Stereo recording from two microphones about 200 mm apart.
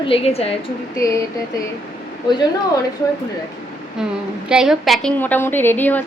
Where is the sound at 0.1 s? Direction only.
30° left (ahead or behind).